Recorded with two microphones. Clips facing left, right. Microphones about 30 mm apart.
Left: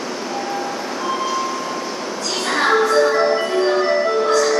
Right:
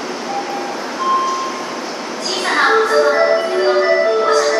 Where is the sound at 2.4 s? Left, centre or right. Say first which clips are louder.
Right 3 dB; right.